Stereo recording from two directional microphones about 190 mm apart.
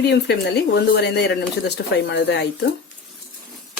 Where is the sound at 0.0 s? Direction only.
60° left (ahead or behind).